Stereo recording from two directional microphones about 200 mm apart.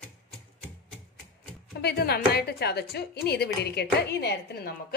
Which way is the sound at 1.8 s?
50° left (ahead or behind).